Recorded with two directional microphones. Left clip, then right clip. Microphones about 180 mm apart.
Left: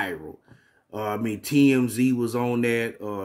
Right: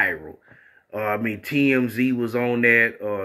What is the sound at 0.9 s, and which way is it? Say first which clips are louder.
Speech: right 4 dB; 30° left (ahead or behind).